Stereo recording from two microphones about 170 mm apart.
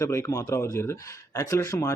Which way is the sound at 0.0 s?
20° left (ahead or behind).